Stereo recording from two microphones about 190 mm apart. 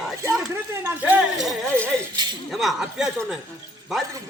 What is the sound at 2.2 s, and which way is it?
Speech, 25° right (ahead or behind).